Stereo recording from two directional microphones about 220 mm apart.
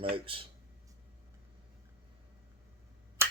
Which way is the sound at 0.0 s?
25° right (ahead or behind).